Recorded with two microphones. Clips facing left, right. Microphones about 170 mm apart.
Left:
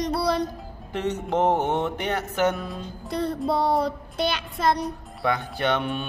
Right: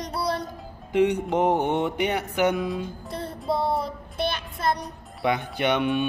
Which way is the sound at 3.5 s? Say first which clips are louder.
Left 2 dB; 75° left (ahead or behind).